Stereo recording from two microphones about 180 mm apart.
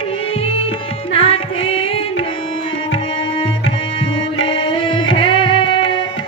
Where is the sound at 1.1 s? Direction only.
30° left (ahead or behind).